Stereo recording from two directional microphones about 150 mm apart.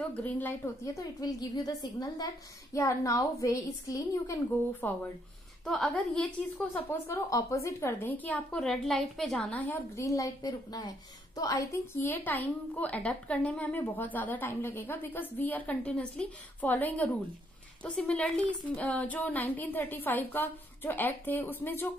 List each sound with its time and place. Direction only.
0.1 s a woman's voice: 10° left (ahead or behind)
5.7 s a woman's voice: centre (ahead or behind)